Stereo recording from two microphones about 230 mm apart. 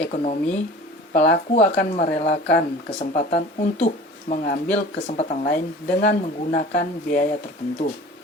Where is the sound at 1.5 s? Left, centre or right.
Left.